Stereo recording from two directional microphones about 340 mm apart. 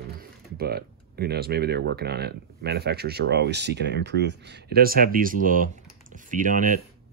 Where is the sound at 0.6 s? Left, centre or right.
Right.